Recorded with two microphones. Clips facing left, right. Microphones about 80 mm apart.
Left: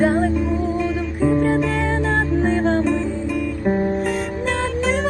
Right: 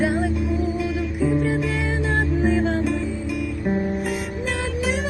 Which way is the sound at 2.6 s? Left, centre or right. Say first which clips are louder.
Left 4 dB; left.